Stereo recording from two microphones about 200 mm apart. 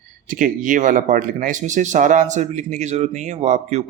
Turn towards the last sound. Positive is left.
turn(degrees=-35)  # may be behind; listen again after turning